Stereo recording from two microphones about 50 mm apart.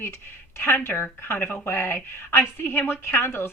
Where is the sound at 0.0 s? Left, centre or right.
Left.